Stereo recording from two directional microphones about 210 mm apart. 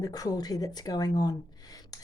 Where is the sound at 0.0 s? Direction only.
20° left (ahead or behind).